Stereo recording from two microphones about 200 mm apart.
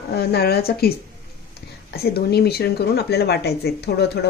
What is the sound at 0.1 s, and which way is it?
Speech, 50° left (ahead or behind).